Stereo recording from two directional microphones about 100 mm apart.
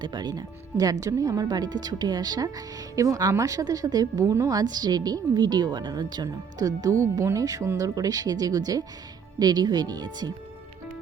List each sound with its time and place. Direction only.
0.0 s speech: 45° right (ahead or behind)